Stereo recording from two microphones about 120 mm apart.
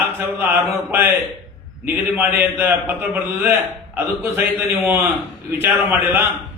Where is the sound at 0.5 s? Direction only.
15° right (ahead or behind).